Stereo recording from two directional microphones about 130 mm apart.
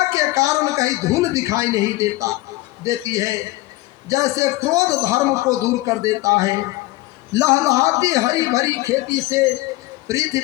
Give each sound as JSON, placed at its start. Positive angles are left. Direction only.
{"t": 0.1, "sound": "a woman's voice", "side_deg": -25}